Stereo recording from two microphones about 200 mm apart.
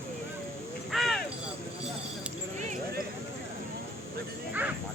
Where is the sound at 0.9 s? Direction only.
Centre (ahead or behind).